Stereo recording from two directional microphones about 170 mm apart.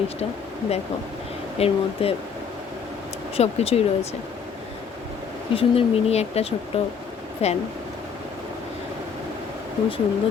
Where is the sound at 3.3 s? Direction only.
35° left (ahead or behind).